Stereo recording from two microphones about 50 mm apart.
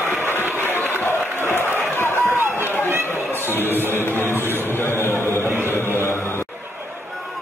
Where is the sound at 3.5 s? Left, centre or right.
Left.